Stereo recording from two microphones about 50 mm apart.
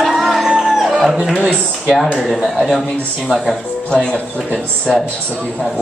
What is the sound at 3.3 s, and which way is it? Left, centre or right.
Speech, centre.